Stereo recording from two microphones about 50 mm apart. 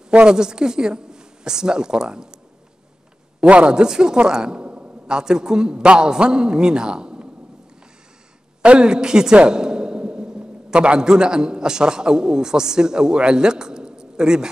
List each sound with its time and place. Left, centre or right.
0.1 s speech: centre
3.3 s a man's voice: right
8.6 s a woman's voice: centre